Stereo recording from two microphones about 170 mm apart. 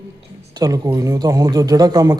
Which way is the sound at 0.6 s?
20° right (ahead or behind).